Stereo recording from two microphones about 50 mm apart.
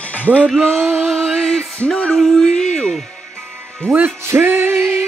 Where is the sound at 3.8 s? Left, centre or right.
Right.